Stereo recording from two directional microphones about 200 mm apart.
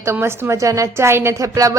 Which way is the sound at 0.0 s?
15° right (ahead or behind).